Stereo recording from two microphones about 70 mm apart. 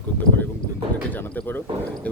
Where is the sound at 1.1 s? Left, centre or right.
Left.